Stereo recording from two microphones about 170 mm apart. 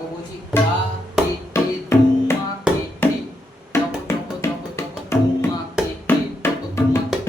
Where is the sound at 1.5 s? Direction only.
15° left (ahead or behind).